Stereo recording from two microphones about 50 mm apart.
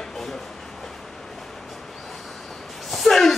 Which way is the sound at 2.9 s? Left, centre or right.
Centre.